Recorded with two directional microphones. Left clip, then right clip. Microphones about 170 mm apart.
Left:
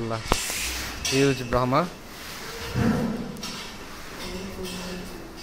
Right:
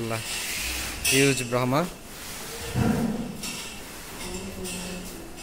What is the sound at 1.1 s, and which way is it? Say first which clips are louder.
Speech: even; 15° right (ahead or behind).